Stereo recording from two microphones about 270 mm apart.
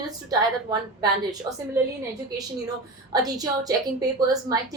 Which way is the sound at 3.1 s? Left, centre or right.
Centre.